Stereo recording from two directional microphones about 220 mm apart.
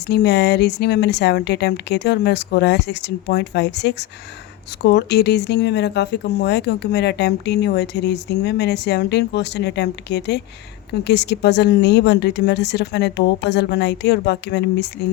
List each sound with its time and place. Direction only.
0.1 s speech: 50° left (ahead or behind)